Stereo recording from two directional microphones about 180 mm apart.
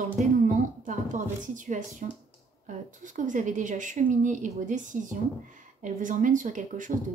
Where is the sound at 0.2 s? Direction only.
45° right (ahead or behind).